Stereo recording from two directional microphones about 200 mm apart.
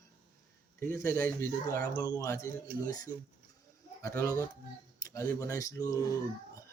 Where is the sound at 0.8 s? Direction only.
10° left (ahead or behind).